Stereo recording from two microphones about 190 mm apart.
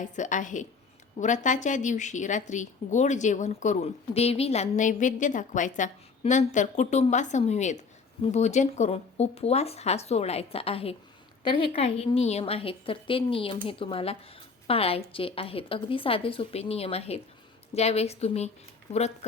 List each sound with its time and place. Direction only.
0.0 s a woman's voice: 40° left (ahead or behind)